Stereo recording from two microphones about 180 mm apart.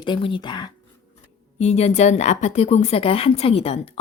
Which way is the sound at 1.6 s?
35° left (ahead or behind).